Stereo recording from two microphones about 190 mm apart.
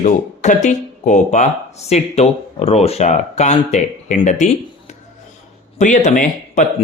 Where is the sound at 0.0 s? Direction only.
40° left (ahead or behind).